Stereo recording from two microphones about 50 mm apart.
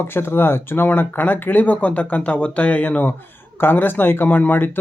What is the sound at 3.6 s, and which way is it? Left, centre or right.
Speech, left.